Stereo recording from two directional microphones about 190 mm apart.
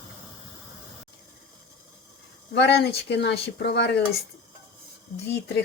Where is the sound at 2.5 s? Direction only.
65° left (ahead or behind).